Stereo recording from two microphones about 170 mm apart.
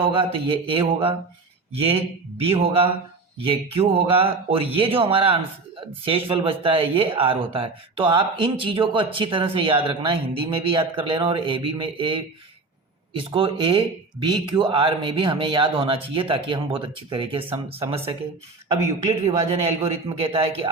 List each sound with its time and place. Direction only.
0.0 s speech: 30° right (ahead or behind)